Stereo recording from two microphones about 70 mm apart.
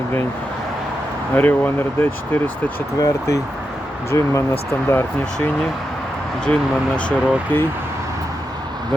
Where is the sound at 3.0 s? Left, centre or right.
Left.